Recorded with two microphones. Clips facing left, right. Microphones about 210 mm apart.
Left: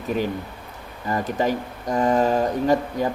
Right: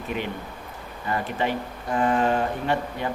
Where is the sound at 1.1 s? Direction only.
40° left (ahead or behind).